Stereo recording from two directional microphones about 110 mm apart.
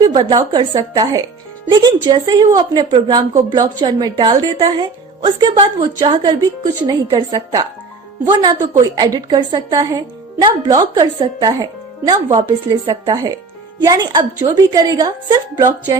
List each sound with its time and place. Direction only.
0.0 s a woman's voice: 40° right (ahead or behind)
2.3 s a woman's voice: 40° right (ahead or behind)
11.2 s a woman's voice: 45° right (ahead or behind)